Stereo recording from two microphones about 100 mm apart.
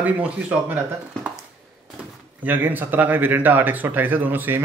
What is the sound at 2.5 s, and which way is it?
Speech, 20° right (ahead or behind).